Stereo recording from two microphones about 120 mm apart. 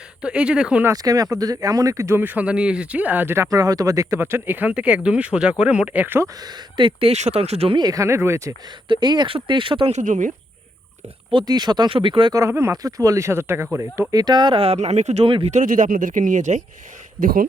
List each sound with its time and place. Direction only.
0.2 s speech: 10° right (ahead or behind)
0.9 s speech: 30° right (ahead or behind)
6.4 s speech: 40° right (ahead or behind)
7.1 s speech: 65° right (ahead or behind)
7.8 s speech: 30° right (ahead or behind)
8.9 s speech: 35° right (ahead or behind)
9.9 s speech: 90° right
11.3 s speech: 40° right (ahead or behind)
12.3 s speech: 25° right (ahead or behind)
14.1 s speech: 35° right (ahead or behind); by 15.3 s 65° right (ahead or behind)
15.4 s speech: 85° right